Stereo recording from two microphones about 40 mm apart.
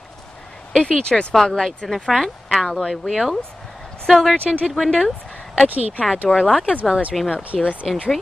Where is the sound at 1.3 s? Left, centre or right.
Centre.